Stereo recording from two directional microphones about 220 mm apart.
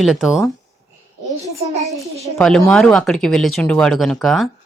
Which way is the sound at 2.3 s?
5° left (ahead or behind).